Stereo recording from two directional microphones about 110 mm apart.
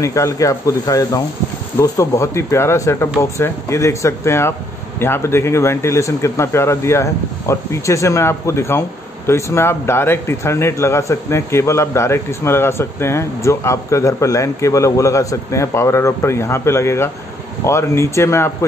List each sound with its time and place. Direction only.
0.0 s speech: 30° left (ahead or behind)